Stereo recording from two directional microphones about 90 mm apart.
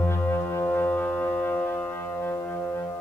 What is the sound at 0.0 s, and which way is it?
Music, 25° left (ahead or behind).